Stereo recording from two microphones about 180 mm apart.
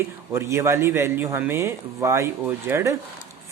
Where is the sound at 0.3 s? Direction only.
15° right (ahead or behind).